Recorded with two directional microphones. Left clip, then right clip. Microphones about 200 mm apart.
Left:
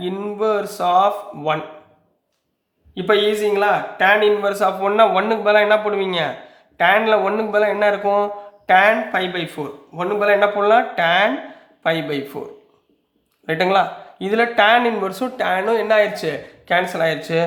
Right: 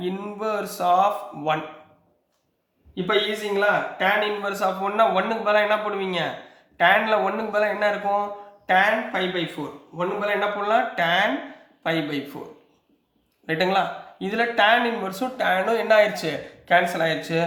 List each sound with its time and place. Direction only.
0.0 s speech: 25° left (ahead or behind)
3.9 s speech: 40° left (ahead or behind)
13.5 s speech: 35° left (ahead or behind)